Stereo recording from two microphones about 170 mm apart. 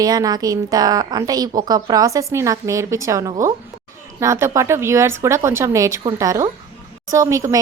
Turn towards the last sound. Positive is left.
turn(degrees=-20)  # may be behind; listen again after turning